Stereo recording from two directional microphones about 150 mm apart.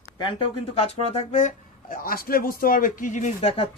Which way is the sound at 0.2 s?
35° left (ahead or behind).